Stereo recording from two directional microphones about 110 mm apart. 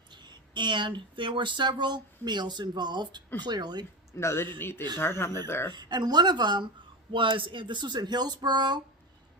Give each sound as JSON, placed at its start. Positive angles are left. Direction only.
{"t": 0.1, "sound": "speech", "side_deg": -40}
{"t": 4.2, "sound": "speech", "side_deg": 25}
{"t": 5.7, "sound": "speech", "side_deg": -40}